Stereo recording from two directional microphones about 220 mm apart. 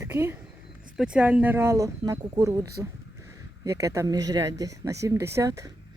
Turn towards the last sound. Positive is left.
turn(degrees=-15)  # may be behind; listen again after turning